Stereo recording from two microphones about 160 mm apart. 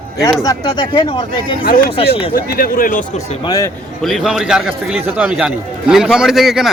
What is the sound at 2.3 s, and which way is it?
Speech, 65° left (ahead or behind).